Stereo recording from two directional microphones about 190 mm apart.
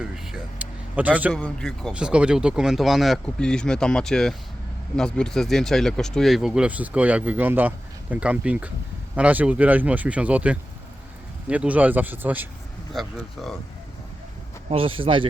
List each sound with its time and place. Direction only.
0.0 s a sound: 5° right (ahead or behind)
1.3 s speech: 5° left (ahead or behind)
14.7 s speech: 30° right (ahead or behind)